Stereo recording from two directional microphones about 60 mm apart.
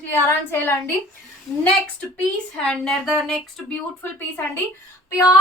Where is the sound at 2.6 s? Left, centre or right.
Centre.